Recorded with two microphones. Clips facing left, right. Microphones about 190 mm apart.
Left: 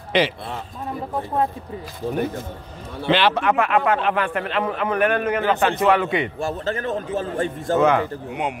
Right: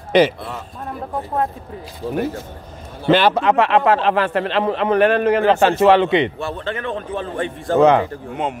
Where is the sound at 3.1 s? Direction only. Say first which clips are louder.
Right 4 dB; 45° right (ahead or behind).